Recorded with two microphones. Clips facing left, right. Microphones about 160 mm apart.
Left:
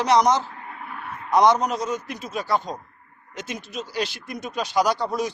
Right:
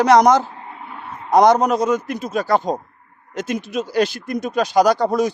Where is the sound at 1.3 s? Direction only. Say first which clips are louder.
Right 5 dB; 45° right (ahead or behind).